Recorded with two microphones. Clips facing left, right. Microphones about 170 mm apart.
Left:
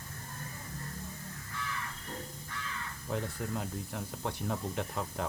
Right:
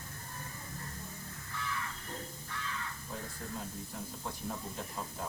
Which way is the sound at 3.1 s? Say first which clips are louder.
Left 9 dB; 70° left (ahead or behind).